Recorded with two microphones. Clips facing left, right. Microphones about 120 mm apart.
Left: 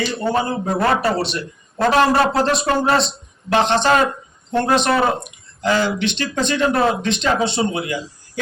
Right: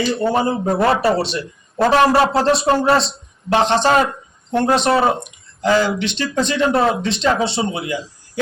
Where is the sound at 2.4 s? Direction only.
35° right (ahead or behind).